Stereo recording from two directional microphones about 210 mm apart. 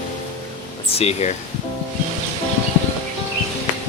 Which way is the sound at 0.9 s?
30° left (ahead or behind).